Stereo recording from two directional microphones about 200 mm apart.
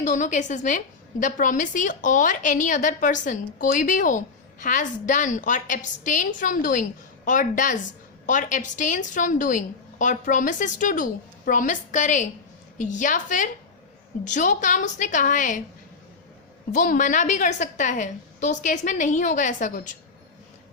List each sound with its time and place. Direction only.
0.0 s a woman's voice: 35° left (ahead or behind)
16.7 s a woman's voice: 40° left (ahead or behind)